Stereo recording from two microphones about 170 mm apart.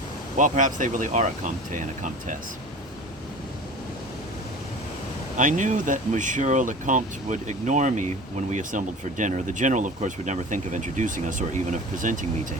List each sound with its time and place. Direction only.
0.3 s speech: 50° right (ahead or behind)
5.4 s speech: 45° right (ahead or behind)